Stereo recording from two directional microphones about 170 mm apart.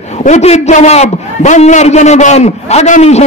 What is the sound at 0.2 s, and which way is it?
A man's voice, 40° left (ahead or behind).